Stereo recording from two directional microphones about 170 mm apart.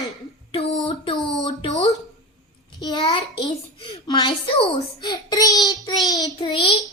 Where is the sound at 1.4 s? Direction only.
25° left (ahead or behind).